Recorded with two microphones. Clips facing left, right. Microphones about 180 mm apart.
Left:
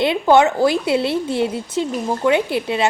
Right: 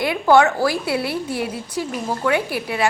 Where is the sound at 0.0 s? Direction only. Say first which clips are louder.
Left 1 dB; 20° left (ahead or behind).